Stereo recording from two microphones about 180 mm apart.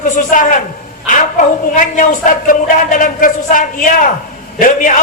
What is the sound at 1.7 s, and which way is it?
A man's voice, 45° left (ahead or behind).